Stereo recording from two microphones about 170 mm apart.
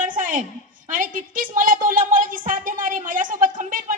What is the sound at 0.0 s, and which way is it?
A woman's voice, 50° right (ahead or behind).